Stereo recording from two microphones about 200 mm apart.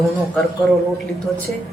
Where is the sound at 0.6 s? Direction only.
5° left (ahead or behind).